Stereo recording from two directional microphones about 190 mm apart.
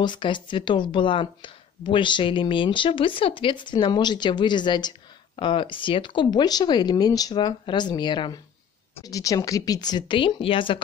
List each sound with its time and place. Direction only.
0.0 s speech: 25° left (ahead or behind)